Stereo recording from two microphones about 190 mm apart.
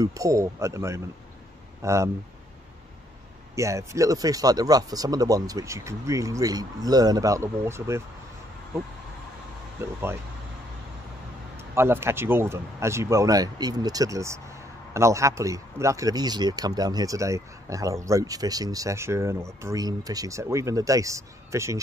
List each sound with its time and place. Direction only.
0.0 s speech: 15° right (ahead or behind)
3.5 s speech: 15° right (ahead or behind)
9.8 s speech: 10° right (ahead or behind)
11.5 s speech: 15° right (ahead or behind)